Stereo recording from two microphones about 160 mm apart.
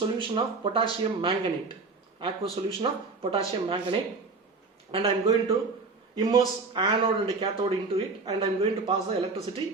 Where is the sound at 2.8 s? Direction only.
35° right (ahead or behind).